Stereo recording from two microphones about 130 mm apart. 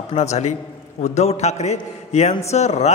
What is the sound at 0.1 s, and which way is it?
A man's voice, 60° left (ahead or behind).